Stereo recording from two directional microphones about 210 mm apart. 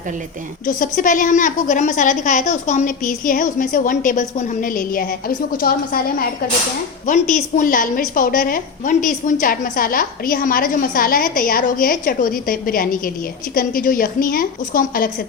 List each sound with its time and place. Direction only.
0.6 s a woman's voice: 40° left (ahead or behind)